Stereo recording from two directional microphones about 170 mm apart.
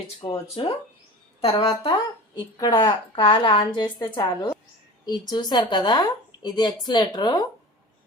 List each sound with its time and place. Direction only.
0.2 s a woman's voice: 30° left (ahead or behind)